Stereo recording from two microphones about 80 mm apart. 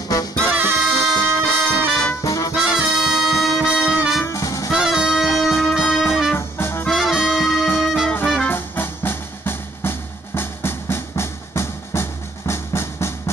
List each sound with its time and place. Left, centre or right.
0.5 s music: right
1.1 s music: centre
2.2 s brass instrument: left
2.5 s music: centre
4.3 s music: left
4.6 s brass instrument: centre
6.3 s music: left
6.9 s music: centre
8.5 s music: left